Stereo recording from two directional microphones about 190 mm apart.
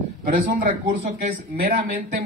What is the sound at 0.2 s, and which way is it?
Speech, 50° right (ahead or behind).